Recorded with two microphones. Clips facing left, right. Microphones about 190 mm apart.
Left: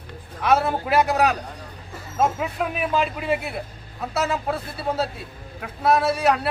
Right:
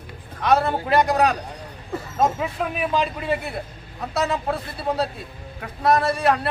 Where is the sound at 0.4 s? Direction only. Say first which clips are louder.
Right 1 dB; 5° left (ahead or behind).